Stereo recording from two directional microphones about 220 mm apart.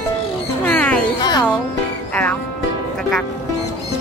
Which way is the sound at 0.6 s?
5° left (ahead or behind).